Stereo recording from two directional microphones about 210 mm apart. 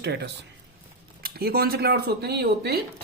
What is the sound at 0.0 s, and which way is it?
A man's voice, 55° right (ahead or behind).